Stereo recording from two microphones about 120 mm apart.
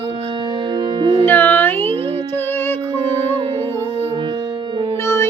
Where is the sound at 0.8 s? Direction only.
40° right (ahead or behind).